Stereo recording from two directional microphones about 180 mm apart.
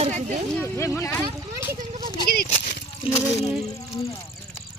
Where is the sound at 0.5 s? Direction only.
15° left (ahead or behind).